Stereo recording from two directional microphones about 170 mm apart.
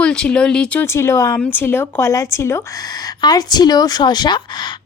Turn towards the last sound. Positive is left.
turn(degrees=25)  # may be behind; listen again after turning